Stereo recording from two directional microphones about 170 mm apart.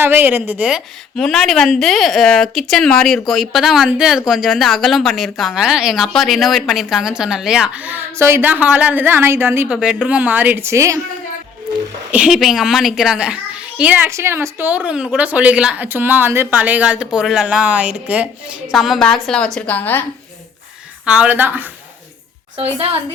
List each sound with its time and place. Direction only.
0.0 s a child's voice: 10° right (ahead or behind)
1.1 s speech: centre (ahead or behind); by 11.0 s 15° right (ahead or behind)
12.1 s a child's voice: 5° right (ahead or behind); by 20.1 s 10° left (ahead or behind)
21.0 s a child's voice: 5° right (ahead or behind)
22.5 s a woman's voice: 35° right (ahead or behind)